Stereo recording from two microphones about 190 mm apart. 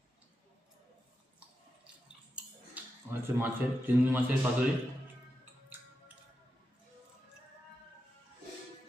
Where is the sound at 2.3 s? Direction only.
5° right (ahead or behind).